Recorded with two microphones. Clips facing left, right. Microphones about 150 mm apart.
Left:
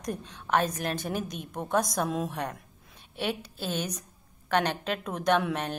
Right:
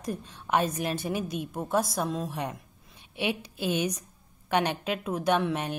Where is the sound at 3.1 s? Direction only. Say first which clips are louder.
Right 1 dB; 10° right (ahead or behind).